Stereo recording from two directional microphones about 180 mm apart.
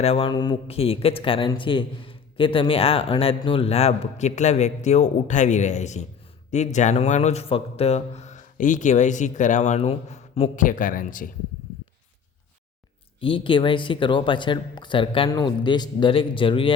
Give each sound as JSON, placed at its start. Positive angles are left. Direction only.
{"t": 0.0, "sound": "speech", "side_deg": 30}
{"t": 10.5, "sound": "speech", "side_deg": 45}
{"t": 13.1, "sound": "speech", "side_deg": 30}